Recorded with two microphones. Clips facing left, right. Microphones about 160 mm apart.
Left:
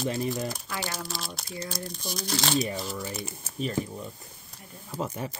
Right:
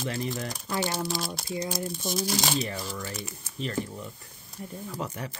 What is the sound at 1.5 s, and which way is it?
Speech, 15° right (ahead or behind).